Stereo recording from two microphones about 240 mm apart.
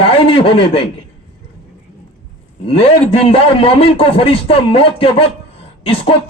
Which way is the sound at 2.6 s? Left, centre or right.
Left.